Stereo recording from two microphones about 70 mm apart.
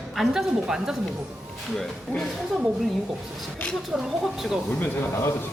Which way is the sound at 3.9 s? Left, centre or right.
Centre.